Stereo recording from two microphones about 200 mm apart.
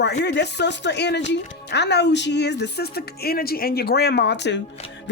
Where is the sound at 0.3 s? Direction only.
60° left (ahead or behind).